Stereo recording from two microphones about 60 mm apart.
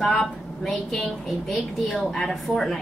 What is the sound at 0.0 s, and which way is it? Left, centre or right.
A woman's voice, centre.